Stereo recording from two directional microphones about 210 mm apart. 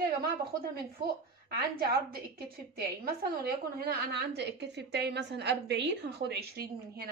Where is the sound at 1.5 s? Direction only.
45° right (ahead or behind).